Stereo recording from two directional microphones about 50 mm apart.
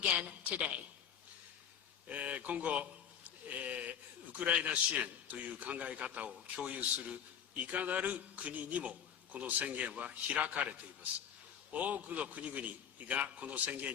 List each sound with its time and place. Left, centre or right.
0.4 s a man's voice: right
2.0 s a man's voice: right
3.2 s a sound: right
4.3 s a man's voice: right